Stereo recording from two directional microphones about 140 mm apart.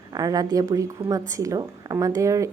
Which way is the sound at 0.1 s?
25° right (ahead or behind).